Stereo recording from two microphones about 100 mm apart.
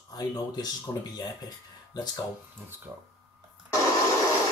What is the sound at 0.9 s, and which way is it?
Speech, 30° left (ahead or behind).